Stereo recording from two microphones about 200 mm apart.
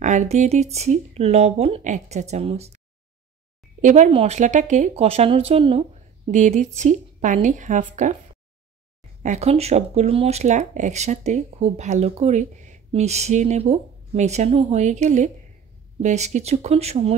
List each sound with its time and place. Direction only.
0.0 s speech: 35° right (ahead or behind)
3.8 s speech: 35° right (ahead or behind)
9.2 s speech: 35° right (ahead or behind)